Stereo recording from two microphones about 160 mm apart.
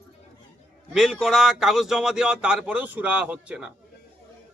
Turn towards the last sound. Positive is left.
turn(degrees=-10)  # may be behind; listen again after turning